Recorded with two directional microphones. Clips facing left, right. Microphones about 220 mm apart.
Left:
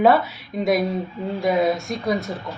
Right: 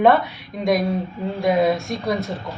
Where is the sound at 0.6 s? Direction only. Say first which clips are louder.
Even; 5° left (ahead or behind).